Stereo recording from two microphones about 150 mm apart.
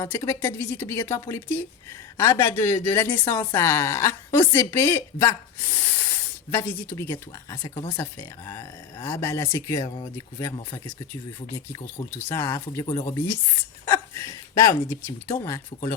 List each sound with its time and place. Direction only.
0.0 s a woman's voice: 20° left (ahead or behind)
6.5 s a woman's voice: 20° left (ahead or behind)
13.8 s hiccup: 20° left (ahead or behind)
15.4 s a woman's voice: 20° left (ahead or behind)